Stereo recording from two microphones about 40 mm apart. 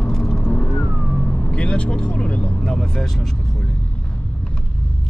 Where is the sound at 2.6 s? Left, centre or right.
Centre.